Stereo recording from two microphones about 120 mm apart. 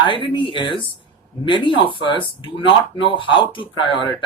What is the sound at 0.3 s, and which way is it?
A man's voice, 45° left (ahead or behind).